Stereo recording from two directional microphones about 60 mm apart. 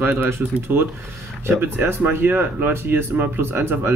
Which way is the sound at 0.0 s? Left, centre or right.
Right.